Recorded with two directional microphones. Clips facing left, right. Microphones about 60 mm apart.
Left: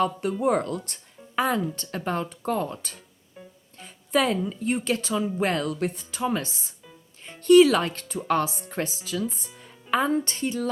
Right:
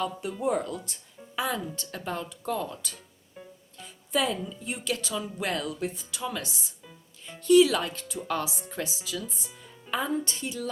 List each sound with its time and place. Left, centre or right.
0.0 s speech: left
4.1 s speech: left
6.1 s speech: left